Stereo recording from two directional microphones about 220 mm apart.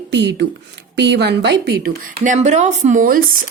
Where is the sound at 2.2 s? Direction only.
35° right (ahead or behind).